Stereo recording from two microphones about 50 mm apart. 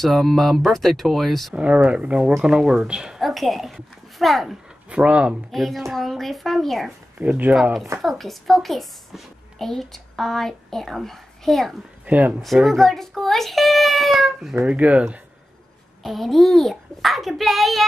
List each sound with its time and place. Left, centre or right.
0.0 s a child's voice: centre
1.5 s speech: right
3.2 s a child's voice: centre
4.8 s speech: right
5.5 s a child's voice: centre
7.2 s speech: right
8.0 s a child's voice: centre
12.1 s speech: right
12.6 s a child's voice: centre
14.6 s speech: right
16.0 s a child's voice: centre